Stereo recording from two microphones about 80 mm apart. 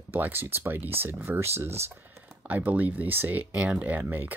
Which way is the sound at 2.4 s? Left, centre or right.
Right.